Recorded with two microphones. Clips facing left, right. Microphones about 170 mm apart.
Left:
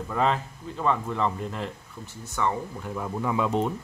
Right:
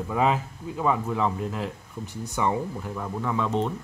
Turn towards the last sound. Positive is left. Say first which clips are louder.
# left 1 dB
turn(degrees=10)  # may be behind; listen again after turning